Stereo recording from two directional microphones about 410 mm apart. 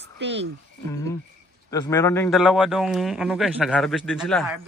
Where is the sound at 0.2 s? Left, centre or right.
Right.